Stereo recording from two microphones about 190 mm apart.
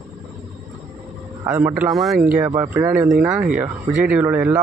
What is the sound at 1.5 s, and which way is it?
Speech, 10° right (ahead or behind).